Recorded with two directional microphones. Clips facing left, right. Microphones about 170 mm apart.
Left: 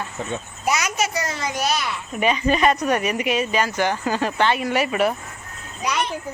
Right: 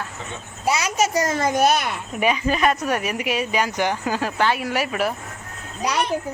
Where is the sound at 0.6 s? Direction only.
30° right (ahead or behind); by 2.0 s 55° right (ahead or behind).